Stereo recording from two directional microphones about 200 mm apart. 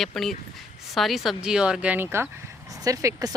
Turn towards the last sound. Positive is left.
turn(degrees=-15)  # may be behind; listen again after turning